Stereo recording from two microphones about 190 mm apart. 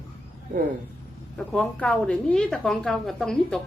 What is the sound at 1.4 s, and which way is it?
A woman's voice, 5° left (ahead or behind).